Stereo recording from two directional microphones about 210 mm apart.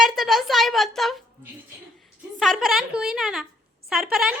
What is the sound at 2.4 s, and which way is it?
Speech, centre (ahead or behind).